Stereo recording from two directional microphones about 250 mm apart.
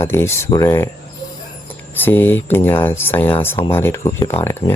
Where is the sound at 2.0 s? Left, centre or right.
Centre.